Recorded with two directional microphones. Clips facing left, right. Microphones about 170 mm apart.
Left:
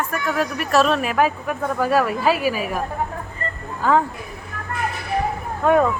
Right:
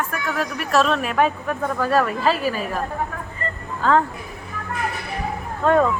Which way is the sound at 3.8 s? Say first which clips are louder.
Even; 10° left (ahead or behind).